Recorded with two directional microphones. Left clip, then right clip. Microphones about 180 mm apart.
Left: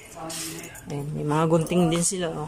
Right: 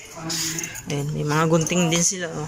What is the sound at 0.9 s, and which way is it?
Speech, 5° left (ahead or behind).